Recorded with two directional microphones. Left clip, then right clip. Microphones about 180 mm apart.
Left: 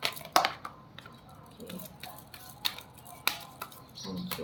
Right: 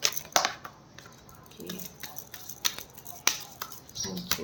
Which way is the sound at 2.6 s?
20° right (ahead or behind).